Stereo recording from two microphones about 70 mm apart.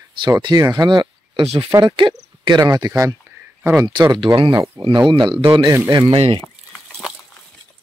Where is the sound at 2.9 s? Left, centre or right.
Right.